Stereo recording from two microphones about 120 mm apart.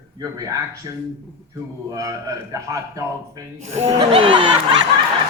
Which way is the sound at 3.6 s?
65° right (ahead or behind).